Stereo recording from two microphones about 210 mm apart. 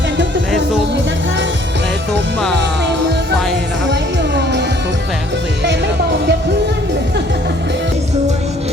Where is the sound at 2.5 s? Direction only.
55° right (ahead or behind).